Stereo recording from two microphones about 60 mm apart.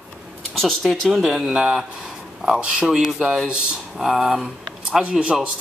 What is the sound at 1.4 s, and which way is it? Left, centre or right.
Speech, centre.